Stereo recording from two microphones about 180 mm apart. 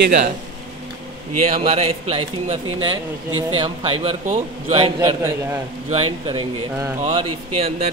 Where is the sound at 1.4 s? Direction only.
35° right (ahead or behind).